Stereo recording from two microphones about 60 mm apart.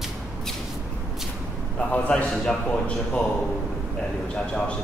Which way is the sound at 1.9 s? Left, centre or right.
Left.